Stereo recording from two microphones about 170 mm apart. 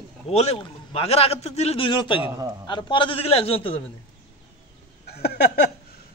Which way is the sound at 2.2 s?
15° right (ahead or behind).